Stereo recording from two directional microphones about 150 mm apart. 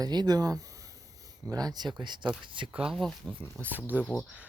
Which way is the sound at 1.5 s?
25° right (ahead or behind).